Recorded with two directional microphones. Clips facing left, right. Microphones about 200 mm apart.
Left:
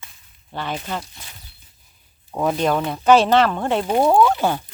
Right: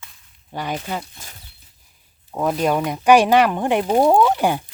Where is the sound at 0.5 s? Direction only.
10° right (ahead or behind).